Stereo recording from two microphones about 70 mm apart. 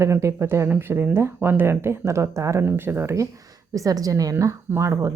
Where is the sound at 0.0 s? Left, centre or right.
Right.